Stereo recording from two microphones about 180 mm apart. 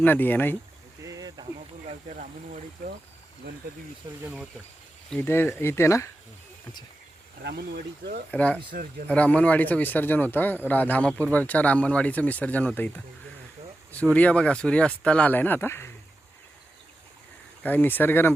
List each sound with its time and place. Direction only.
0.0 s speech: 10° left (ahead or behind)
1.0 s a sound: 20° right (ahead or behind)
1.9 s speech: 45° right (ahead or behind)
4.2 s speech: 10° right (ahead or behind)
5.1 s speech: 10° left (ahead or behind)
7.4 s speech: 65° right (ahead or behind)
8.3 s speech: 5° left (ahead or behind)
8.7 s speech: 50° right (ahead or behind)
9.0 s speech: 5° left (ahead or behind)
13.9 s speech: 10° left (ahead or behind)
17.6 s speech: 10° left (ahead or behind)